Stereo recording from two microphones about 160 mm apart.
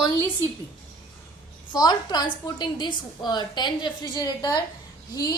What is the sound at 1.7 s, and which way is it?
A woman's voice, 25° left (ahead or behind).